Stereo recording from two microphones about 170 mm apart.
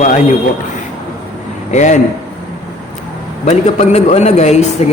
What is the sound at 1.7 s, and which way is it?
Speech, 45° left (ahead or behind).